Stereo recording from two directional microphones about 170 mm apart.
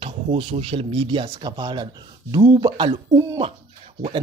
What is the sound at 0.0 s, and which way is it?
Speech, 30° right (ahead or behind).